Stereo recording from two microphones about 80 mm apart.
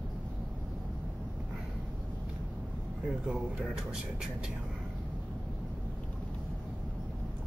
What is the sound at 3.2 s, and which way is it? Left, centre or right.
Speech, centre.